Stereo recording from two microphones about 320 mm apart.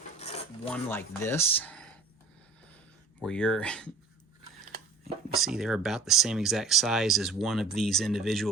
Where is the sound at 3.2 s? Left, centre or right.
Centre.